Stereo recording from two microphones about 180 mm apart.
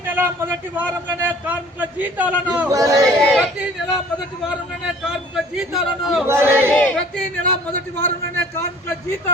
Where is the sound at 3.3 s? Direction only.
Centre (ahead or behind).